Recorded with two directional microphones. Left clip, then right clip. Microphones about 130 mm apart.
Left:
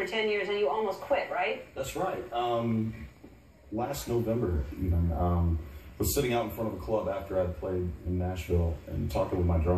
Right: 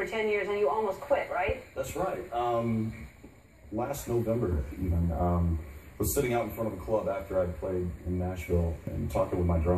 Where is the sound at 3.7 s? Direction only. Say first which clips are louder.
Even; 15° right (ahead or behind).